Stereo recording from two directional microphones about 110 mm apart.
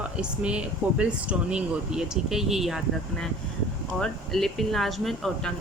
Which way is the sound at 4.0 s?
5° left (ahead or behind).